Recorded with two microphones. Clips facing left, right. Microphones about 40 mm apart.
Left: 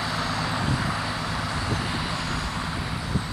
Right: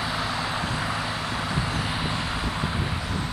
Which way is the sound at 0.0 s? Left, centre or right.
Centre.